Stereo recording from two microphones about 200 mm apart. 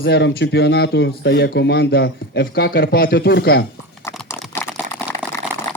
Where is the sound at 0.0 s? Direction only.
55° left (ahead or behind).